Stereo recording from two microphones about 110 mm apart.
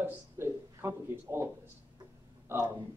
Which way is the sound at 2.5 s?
20° right (ahead or behind).